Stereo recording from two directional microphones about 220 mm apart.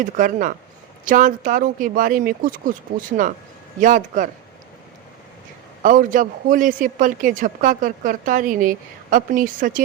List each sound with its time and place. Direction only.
0.0 s a woman's voice: 35° right (ahead or behind)
5.8 s a woman's voice: 40° right (ahead or behind)